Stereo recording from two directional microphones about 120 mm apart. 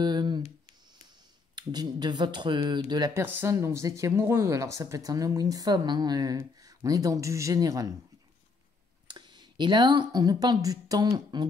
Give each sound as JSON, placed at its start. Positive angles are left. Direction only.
{"t": 0.0, "sound": "a sound", "side_deg": -35}
{"t": 1.5, "sound": "speech", "side_deg": -35}
{"t": 3.2, "sound": "speech", "side_deg": -20}
{"t": 9.0, "sound": "speech", "side_deg": -40}